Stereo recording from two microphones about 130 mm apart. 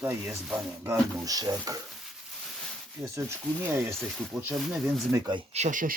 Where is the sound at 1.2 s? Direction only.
30° right (ahead or behind).